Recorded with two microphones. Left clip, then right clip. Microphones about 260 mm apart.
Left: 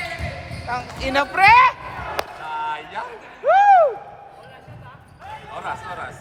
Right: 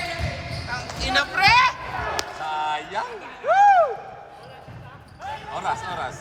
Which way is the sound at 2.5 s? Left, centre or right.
Right.